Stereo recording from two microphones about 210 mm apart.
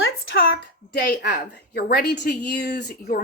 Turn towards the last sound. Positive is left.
turn(degrees=45)  # may be behind; listen again after turning